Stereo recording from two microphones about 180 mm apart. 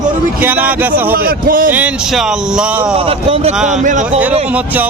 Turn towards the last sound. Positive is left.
turn(degrees=-40)  # may be behind; listen again after turning